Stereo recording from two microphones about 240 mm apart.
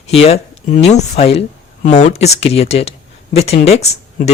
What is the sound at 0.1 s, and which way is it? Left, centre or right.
Speech, left.